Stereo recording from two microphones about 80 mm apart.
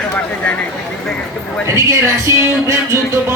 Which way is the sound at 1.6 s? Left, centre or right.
Right.